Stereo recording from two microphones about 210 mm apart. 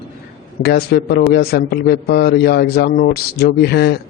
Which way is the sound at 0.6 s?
50° left (ahead or behind).